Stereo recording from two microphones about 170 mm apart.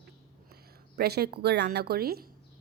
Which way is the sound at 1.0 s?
70° right (ahead or behind).